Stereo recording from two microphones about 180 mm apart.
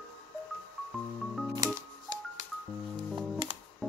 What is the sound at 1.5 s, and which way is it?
Music, 20° right (ahead or behind).